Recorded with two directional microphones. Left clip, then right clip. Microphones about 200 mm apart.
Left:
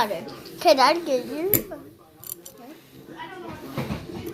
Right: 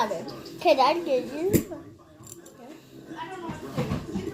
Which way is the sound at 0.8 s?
50° left (ahead or behind).